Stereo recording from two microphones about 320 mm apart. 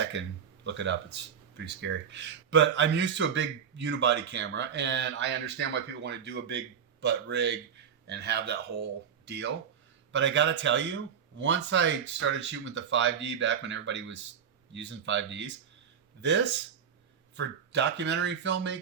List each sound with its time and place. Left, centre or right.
0.1 s speech: right